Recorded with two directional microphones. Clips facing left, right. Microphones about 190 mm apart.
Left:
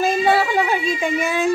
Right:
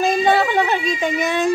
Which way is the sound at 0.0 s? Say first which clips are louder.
Right 1 dB; 5° left (ahead or behind).